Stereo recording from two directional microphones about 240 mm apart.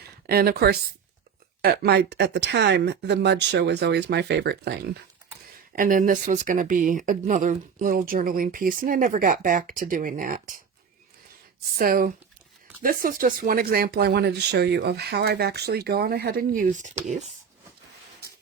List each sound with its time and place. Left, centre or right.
0.3 s speech: right
11.8 s speech: right